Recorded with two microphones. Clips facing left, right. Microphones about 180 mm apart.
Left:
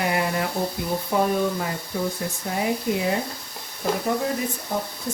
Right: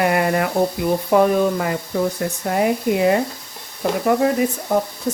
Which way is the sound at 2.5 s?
65° right (ahead or behind).